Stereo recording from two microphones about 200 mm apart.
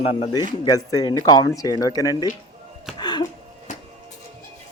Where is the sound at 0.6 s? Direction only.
20° left (ahead or behind).